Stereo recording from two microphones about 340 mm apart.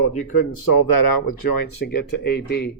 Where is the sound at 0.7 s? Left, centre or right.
Left.